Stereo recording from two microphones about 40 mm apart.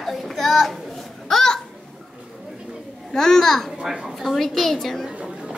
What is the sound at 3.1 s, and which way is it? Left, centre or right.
A child's voice, centre.